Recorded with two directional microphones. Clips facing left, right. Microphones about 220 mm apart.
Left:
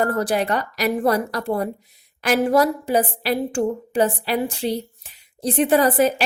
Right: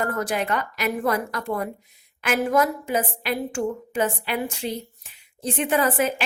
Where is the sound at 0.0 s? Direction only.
35° left (ahead or behind).